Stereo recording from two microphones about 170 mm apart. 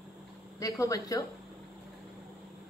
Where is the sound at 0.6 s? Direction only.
20° left (ahead or behind).